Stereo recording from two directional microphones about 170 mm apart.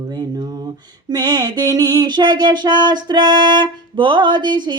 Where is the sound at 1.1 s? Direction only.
25° right (ahead or behind).